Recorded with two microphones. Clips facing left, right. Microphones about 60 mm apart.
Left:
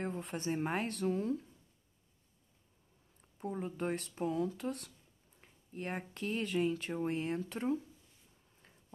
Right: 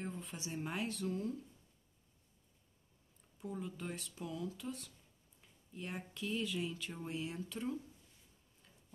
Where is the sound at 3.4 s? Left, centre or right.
Left.